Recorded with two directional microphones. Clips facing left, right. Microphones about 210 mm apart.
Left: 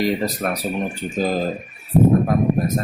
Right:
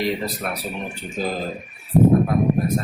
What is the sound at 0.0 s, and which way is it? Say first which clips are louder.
Speech: left 4 dB; 45° left (ahead or behind).